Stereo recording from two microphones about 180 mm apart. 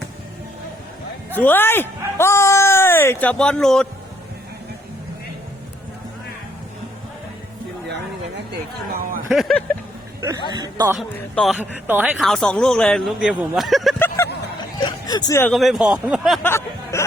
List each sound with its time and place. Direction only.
1.4 s speech: 10° left (ahead or behind)
8.9 s a sound: 50° right (ahead or behind)
9.3 s speech: centre (ahead or behind)
10.5 s speech: 20° right (ahead or behind)
10.9 s speech: centre (ahead or behind)
12.2 s speech: 5° left (ahead or behind)
14.8 s speech: 20° left (ahead or behind)
15.4 s speech: centre (ahead or behind)
16.4 s speech: 15° left (ahead or behind)